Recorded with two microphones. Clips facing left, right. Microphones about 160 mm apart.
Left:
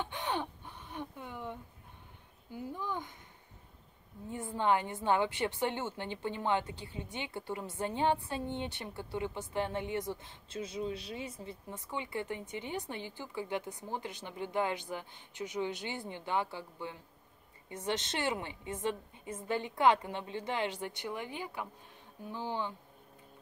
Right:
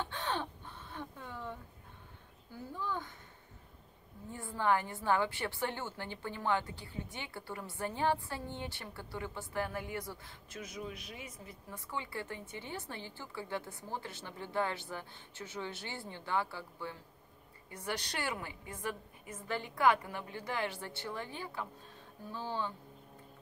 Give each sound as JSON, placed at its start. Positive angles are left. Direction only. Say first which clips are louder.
{"t": 0.0, "sound": "a sound", "louder": "left 1 dB", "side_deg": 15}
{"t": 2.5, "sound": "speech", "louder": "left 1 dB", "side_deg": 15}
{"t": 4.3, "sound": "a woman's voice", "louder": "left 2 dB", "side_deg": 20}